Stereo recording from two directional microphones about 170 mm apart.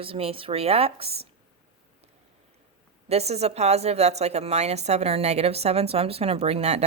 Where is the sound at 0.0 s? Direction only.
35° right (ahead or behind).